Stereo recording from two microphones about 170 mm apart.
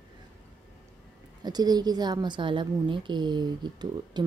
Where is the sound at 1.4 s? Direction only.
25° right (ahead or behind).